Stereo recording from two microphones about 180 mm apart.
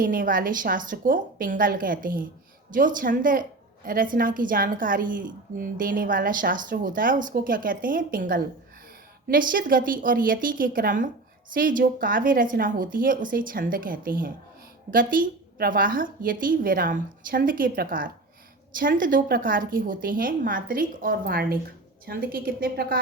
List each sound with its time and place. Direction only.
0.0 s a woman's voice: 50° right (ahead or behind)